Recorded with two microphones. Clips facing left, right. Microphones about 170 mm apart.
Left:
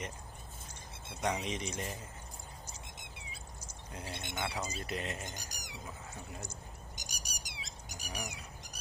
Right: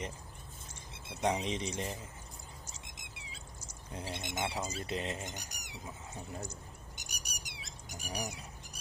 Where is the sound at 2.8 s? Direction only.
90° right.